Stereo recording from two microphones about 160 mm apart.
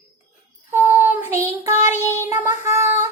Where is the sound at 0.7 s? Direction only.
15° right (ahead or behind).